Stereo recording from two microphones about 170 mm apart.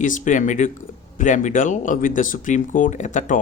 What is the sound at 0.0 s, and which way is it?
Speech, 50° left (ahead or behind).